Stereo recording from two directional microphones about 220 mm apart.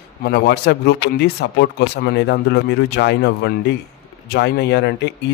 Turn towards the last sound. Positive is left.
turn(degrees=50)  # may be behind; listen again after turning